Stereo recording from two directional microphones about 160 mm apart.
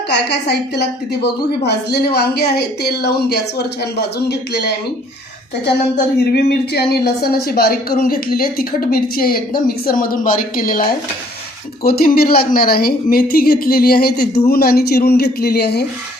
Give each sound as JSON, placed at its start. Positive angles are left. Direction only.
{"t": 0.1, "sound": "a woman's voice", "side_deg": 90}
{"t": 6.3, "sound": "speech", "side_deg": 90}